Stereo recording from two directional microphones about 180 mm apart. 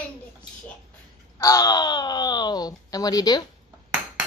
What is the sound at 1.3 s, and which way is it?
Speech, 20° left (ahead or behind).